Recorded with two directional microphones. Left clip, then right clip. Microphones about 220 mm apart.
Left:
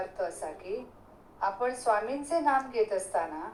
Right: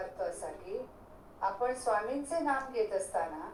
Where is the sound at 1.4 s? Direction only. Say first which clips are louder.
Left 3 dB; 55° left (ahead or behind).